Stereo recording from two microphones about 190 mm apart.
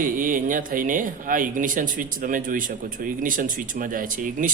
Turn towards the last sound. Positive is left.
turn(degrees=-45)  # may be behind; listen again after turning